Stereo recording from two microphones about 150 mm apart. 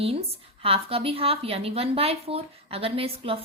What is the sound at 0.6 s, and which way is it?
A woman's voice, 40° right (ahead or behind).